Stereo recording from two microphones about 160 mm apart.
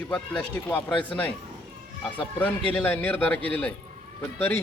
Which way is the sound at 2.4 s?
10° left (ahead or behind).